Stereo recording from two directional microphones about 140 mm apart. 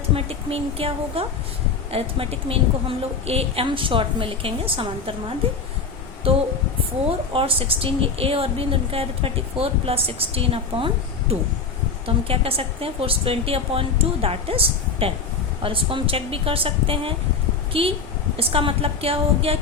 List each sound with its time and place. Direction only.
0.1 s a woman's voice: 45° right (ahead or behind)
6.3 s a woman's voice: 40° right (ahead or behind)